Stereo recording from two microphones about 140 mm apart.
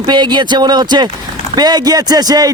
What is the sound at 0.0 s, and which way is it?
Speech, 35° right (ahead or behind).